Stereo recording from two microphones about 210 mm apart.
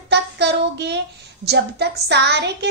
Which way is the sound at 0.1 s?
55° right (ahead or behind).